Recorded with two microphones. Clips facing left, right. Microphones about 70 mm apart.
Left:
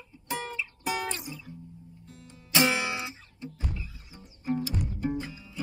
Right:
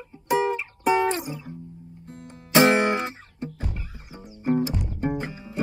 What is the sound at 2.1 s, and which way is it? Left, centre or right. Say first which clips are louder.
Music: right 8 dB; right.